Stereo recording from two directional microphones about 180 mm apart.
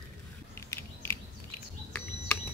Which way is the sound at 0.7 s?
10° left (ahead or behind).